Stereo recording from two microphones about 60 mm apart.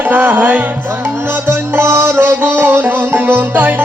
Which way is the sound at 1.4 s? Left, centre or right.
Right.